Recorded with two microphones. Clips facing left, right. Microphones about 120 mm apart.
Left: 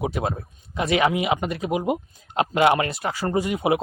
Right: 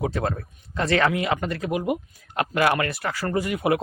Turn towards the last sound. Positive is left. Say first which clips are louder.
# left 1 dB
turn(degrees=20)  # may be behind; listen again after turning